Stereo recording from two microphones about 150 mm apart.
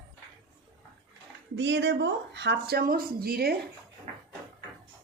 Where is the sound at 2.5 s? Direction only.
90° right.